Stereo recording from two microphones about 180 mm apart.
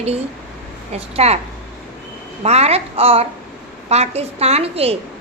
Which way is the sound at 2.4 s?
35° right (ahead or behind).